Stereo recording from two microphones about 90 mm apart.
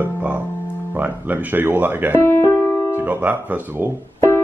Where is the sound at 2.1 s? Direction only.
30° left (ahead or behind).